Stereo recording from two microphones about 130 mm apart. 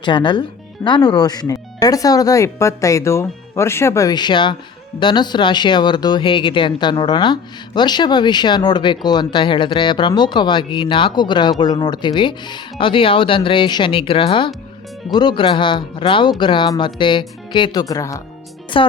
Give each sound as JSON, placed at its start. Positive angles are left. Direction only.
{"t": 0.0, "sound": "speech", "side_deg": 35}
{"t": 18.7, "sound": "speech", "side_deg": 40}